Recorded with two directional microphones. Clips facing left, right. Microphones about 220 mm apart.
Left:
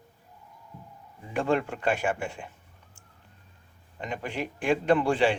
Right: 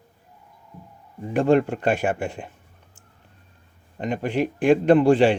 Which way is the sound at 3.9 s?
45° right (ahead or behind).